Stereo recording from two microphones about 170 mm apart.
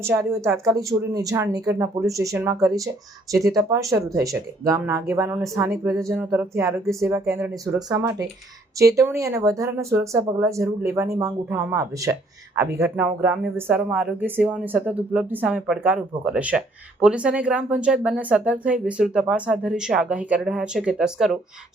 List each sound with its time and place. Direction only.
0.0 s speech: 15° right (ahead or behind)